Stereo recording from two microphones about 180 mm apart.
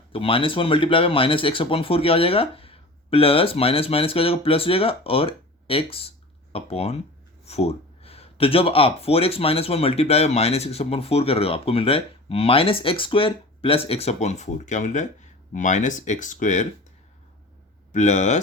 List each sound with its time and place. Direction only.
0.1 s speech: 30° left (ahead or behind)
17.9 s speech: 40° left (ahead or behind)